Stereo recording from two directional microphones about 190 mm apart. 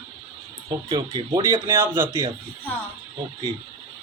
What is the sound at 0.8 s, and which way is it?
Speech, 25° right (ahead or behind).